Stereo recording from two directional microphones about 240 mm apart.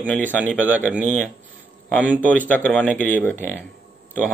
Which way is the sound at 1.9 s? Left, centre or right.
Centre.